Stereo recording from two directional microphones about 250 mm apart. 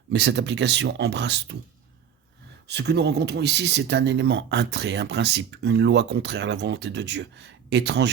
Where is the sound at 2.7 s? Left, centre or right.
Right.